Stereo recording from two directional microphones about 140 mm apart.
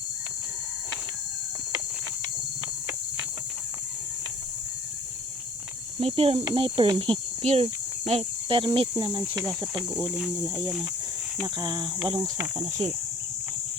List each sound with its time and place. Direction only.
6.0 s speech: 45° right (ahead or behind)
10.1 s speech: 5° right (ahead or behind)
10.5 s speech: 5° left (ahead or behind)
11.4 s speech: 30° right (ahead or behind)
12.5 s speech: 55° right (ahead or behind)